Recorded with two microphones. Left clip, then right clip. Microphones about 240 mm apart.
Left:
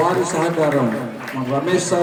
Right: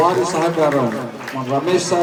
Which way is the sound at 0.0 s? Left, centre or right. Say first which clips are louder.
Right 2 dB; right.